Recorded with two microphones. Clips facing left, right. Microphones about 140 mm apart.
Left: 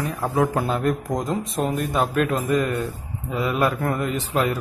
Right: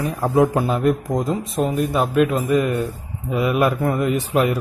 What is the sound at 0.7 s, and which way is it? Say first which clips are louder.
Mantra: right 4 dB; 5° right (ahead or behind).